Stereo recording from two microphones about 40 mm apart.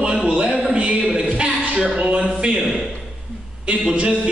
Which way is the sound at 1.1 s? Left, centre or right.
Right.